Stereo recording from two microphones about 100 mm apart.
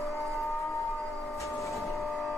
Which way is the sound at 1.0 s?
Centre (ahead or behind).